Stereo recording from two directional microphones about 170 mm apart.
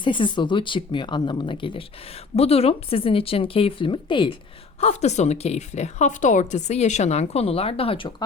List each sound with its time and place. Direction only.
0.0 s speech: 30° left (ahead or behind)
4.8 s speech: 40° left (ahead or behind)